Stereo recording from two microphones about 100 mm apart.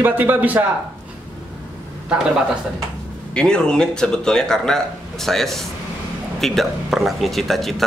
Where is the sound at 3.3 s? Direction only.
10° left (ahead or behind).